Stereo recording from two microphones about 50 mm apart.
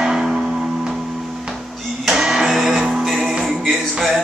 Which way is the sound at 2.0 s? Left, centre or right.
Centre.